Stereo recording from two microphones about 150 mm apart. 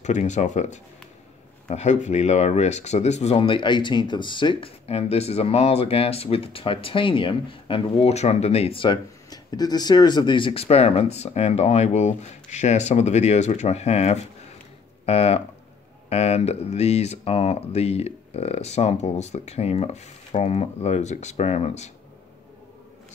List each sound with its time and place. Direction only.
0.0 s speech: 50° left (ahead or behind)